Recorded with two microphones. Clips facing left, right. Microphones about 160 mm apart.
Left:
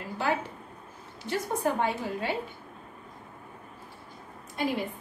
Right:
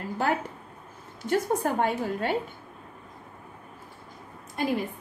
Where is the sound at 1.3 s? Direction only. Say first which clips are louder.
Right 3 dB; 50° right (ahead or behind).